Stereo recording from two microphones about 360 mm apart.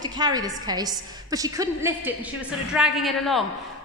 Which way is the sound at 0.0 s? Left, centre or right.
Centre.